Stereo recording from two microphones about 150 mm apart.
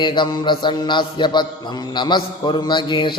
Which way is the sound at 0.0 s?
30° left (ahead or behind).